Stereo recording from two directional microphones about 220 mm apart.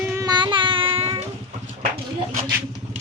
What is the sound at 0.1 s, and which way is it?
Child singing, 15° right (ahead or behind).